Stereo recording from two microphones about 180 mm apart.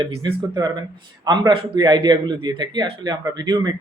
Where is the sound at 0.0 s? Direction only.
30° right (ahead or behind).